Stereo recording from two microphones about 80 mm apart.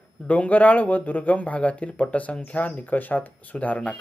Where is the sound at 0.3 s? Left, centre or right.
Centre.